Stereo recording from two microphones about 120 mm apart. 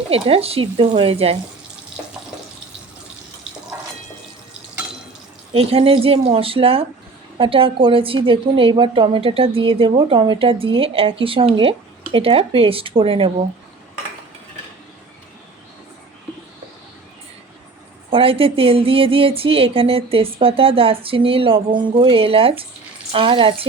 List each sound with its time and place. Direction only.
0.1 s a woman's voice: 55° right (ahead or behind)
5.5 s a woman's voice: 55° right (ahead or behind)
18.1 s a woman's voice: 50° right (ahead or behind)